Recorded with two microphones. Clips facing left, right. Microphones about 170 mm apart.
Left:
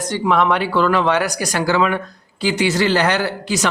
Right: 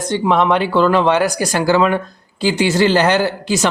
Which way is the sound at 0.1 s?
25° right (ahead or behind).